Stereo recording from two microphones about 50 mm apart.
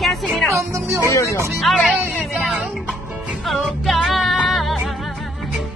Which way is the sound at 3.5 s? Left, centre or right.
Centre.